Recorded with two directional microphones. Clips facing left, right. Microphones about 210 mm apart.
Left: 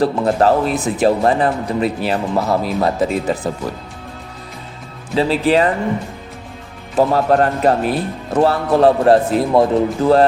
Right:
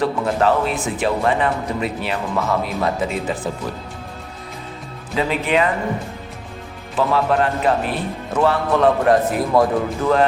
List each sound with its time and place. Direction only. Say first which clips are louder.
0.0 s speech: left 4 dB; 40° left (ahead or behind)
5.1 s speech: left 5 dB; 35° left (ahead or behind)
6.9 s speech: left 4 dB; 40° left (ahead or behind)